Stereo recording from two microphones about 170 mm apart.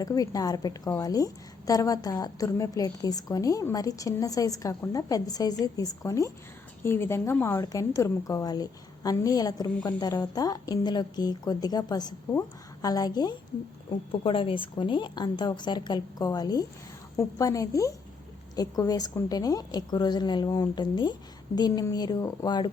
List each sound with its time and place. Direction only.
0.0 s a woman's voice: 20° left (ahead or behind)